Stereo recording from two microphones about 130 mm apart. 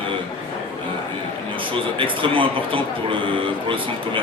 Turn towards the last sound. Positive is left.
turn(degrees=-40)  # may be behind; listen again after turning